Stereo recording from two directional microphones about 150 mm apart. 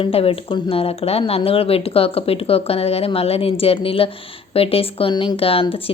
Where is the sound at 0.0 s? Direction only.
40° left (ahead or behind).